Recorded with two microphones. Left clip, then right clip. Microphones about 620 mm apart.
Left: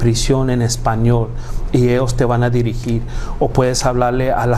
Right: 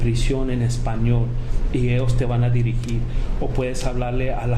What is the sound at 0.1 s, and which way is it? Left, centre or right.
Speech, left.